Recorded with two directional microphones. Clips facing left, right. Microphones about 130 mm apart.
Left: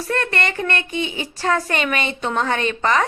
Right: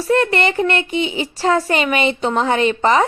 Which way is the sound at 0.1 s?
30° right (ahead or behind).